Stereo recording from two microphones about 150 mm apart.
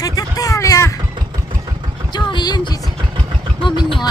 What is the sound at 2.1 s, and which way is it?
Vehicle, 30° left (ahead or behind).